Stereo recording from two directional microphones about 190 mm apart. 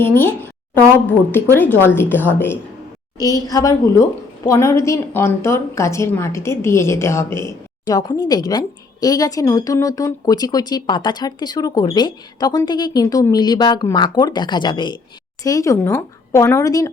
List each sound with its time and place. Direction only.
0.0 s a woman's voice: 10° left (ahead or behind)